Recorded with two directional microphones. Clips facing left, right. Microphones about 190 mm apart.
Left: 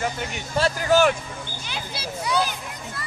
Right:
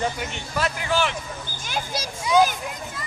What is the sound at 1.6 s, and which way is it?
Speech, 45° right (ahead or behind).